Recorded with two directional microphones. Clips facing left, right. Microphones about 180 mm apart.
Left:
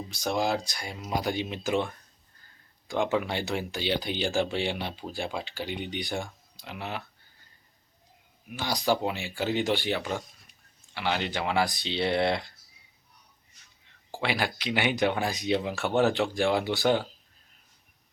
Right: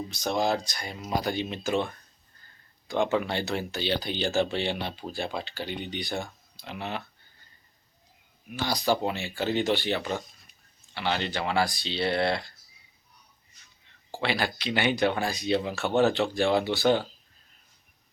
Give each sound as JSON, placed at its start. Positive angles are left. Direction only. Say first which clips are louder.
{"t": 0.1, "sound": "speech", "louder": "even", "side_deg": 10}
{"t": 8.5, "sound": "speech", "louder": "right 1 dB", "side_deg": 15}
{"t": 14.1, "sound": "speech", "louder": "right 1 dB", "side_deg": 15}